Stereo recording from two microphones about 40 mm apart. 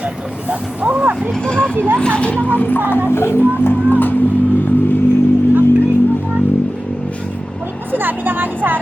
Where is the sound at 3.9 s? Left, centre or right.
Left.